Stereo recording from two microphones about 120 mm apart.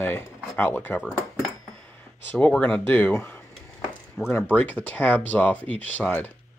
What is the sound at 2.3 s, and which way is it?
Speech, 10° left (ahead or behind).